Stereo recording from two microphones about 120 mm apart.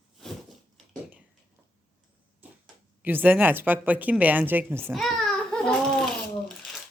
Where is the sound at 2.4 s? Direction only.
15° right (ahead or behind).